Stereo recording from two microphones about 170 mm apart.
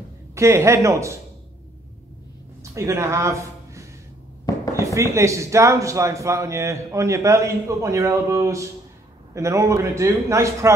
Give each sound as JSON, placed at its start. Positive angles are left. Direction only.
{"t": 0.3, "sound": "speech", "side_deg": -15}
{"t": 2.6, "sound": "speech", "side_deg": -15}